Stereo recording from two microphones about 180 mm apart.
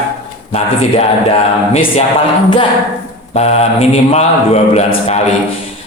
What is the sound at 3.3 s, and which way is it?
Speech, 35° left (ahead or behind).